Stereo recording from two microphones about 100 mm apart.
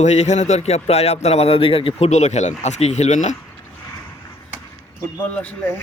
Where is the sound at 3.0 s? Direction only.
90° left.